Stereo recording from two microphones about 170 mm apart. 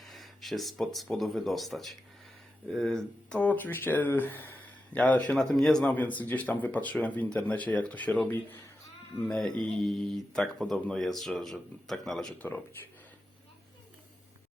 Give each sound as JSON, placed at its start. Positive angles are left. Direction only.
{"t": 0.0, "sound": "speech", "side_deg": 0}
{"t": 9.2, "sound": "speech", "side_deg": 5}